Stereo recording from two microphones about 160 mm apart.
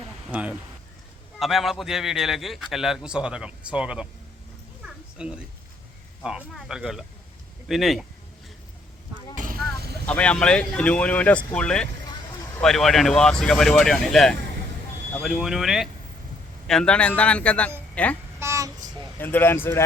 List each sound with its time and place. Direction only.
0.3 s a man's voice: 10° right (ahead or behind)
5.1 s a man's voice: 5° right (ahead or behind)
9.3 s vehicle: 55° right (ahead or behind)
10.1 s a man's voice: 10° left (ahead or behind)
18.3 s child singing: 15° right (ahead or behind)
19.2 s speech: 15° left (ahead or behind)